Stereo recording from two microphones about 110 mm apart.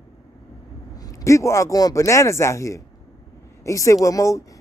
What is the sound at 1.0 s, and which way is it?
Speech, 30° left (ahead or behind).